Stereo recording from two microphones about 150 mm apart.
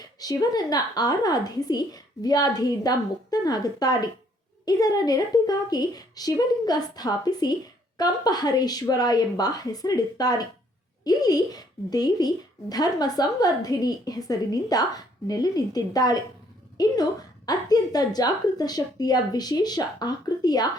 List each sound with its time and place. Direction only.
0.2 s speech: 25° left (ahead or behind)